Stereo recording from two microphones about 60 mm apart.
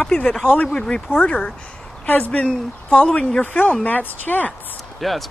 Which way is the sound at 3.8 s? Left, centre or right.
Left.